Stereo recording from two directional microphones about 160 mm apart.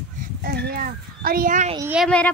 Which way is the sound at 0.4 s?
80° right.